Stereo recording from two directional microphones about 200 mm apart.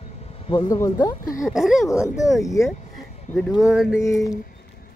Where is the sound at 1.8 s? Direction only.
15° left (ahead or behind).